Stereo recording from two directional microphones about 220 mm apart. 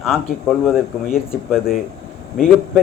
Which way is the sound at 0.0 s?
Centre (ahead or behind).